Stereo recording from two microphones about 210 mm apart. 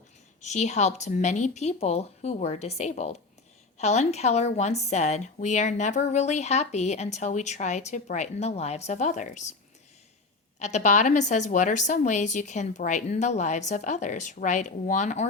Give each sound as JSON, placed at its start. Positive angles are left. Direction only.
{"t": 0.4, "sound": "a woman's voice", "side_deg": 35}
{"t": 10.6, "sound": "a woman's voice", "side_deg": 35}